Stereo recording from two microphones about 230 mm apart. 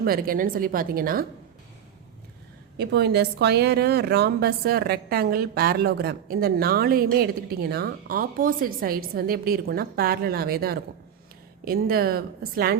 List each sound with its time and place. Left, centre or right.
0.0 s a woman's voice: right
2.7 s a woman's voice: right